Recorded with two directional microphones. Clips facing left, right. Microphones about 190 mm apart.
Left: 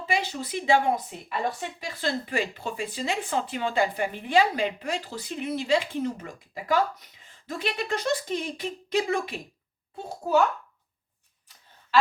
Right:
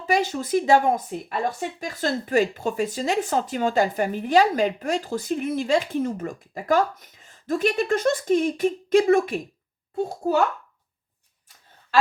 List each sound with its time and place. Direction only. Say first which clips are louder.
0.1 s speech: right 8 dB; 45° right (ahead or behind)